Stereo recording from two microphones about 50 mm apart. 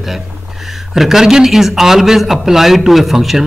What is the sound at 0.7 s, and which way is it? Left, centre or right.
A man's voice, centre.